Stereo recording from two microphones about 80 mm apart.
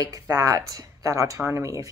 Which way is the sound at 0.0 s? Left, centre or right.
Right.